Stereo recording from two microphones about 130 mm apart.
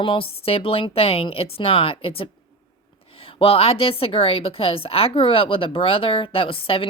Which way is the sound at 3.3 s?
45° left (ahead or behind).